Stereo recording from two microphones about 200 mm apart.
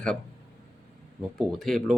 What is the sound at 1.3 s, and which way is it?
Speech, centre (ahead or behind).